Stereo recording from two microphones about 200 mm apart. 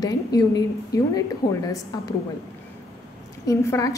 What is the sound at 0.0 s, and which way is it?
A woman's voice, 20° left (ahead or behind).